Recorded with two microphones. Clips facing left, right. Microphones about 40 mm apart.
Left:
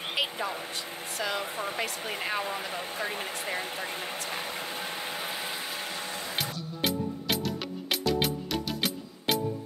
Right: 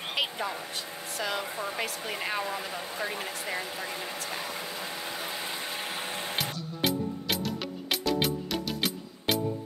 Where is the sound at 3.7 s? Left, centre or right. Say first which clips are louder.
Left 1 dB; left.